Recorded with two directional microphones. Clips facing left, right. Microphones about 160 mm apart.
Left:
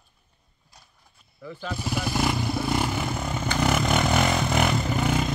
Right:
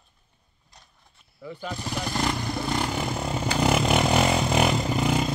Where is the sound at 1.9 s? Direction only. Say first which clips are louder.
Left 2 dB; 5° left (ahead or behind).